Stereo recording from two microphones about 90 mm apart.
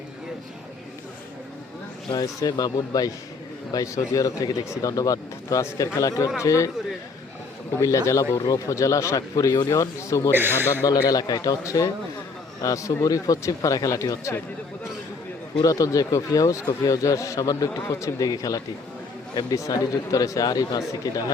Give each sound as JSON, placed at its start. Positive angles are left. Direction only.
{"t": 2.1, "sound": "speech", "side_deg": 45}
{"t": 7.8, "sound": "speech", "side_deg": 35}
{"t": 10.3, "sound": "speech", "side_deg": -25}
{"t": 10.8, "sound": "speech", "side_deg": 45}
{"t": 15.6, "sound": "speech", "side_deg": 40}